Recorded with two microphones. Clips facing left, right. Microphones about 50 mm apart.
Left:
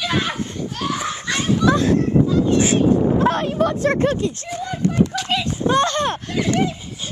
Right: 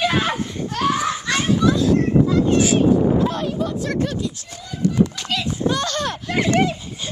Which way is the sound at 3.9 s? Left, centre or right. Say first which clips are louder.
Left 4 dB; left.